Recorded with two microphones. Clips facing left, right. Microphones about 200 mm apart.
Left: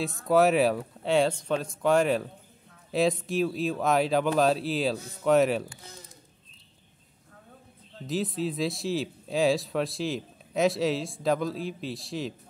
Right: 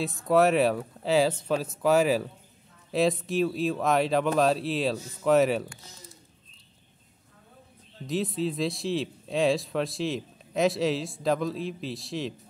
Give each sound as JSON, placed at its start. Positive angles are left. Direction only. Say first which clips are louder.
{"t": 0.0, "sound": "speech", "louder": "even", "side_deg": 0}
{"t": 8.1, "sound": "speech", "louder": "right 1 dB", "side_deg": 0}